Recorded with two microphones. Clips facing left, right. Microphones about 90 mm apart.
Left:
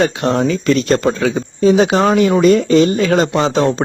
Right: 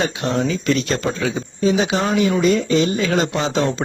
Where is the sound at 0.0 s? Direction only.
55° left (ahead or behind).